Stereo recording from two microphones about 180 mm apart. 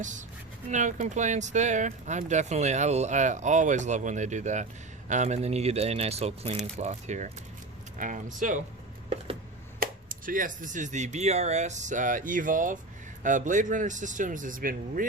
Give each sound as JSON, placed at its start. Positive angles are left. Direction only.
{"t": 0.0, "sound": "speech", "side_deg": -45}
{"t": 9.8, "sound": "speech", "side_deg": -50}